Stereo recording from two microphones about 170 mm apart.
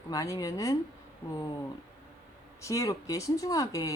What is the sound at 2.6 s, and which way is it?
A woman's voice, 20° left (ahead or behind).